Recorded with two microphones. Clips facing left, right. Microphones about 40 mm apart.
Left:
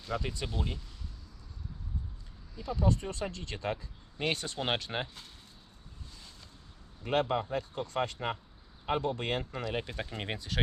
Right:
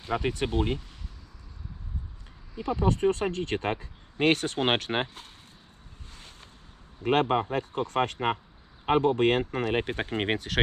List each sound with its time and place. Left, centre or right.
0.0 s speech: right
2.6 s speech: right
6.1 s boat: right
7.0 s speech: right